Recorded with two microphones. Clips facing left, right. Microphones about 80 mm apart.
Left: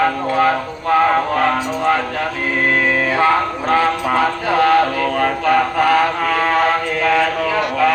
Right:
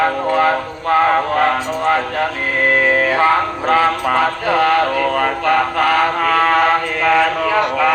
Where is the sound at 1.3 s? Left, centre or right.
Right.